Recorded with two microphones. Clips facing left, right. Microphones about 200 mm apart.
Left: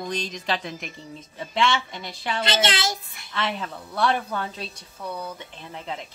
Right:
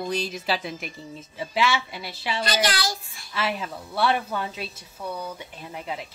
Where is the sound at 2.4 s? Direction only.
25° left (ahead or behind).